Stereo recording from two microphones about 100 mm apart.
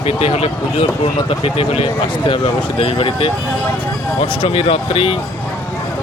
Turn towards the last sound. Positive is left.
turn(degrees=70)  # may be behind; listen again after turning